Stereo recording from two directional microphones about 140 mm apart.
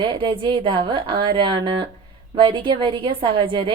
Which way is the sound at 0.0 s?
35° right (ahead or behind).